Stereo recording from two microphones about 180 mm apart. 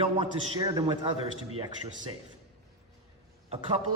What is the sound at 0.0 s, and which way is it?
Speech, 30° right (ahead or behind).